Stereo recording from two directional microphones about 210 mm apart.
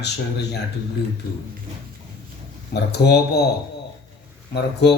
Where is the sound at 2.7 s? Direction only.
50° left (ahead or behind).